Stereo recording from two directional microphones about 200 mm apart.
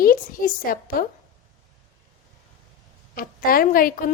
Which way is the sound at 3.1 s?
45° left (ahead or behind).